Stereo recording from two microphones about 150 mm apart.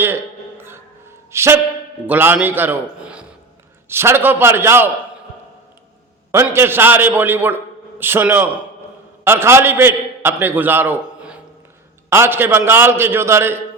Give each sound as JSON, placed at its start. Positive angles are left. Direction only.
{"t": 0.0, "sound": "a sound", "side_deg": -15}
{"t": 2.0, "sound": "a man's voice", "side_deg": -10}
{"t": 6.3, "sound": "a man's voice", "side_deg": -15}